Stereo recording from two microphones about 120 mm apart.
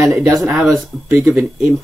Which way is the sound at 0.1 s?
Centre (ahead or behind).